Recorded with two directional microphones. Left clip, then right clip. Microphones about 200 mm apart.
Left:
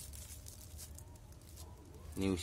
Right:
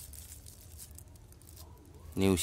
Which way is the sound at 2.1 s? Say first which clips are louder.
Right 8 dB; 55° right (ahead or behind).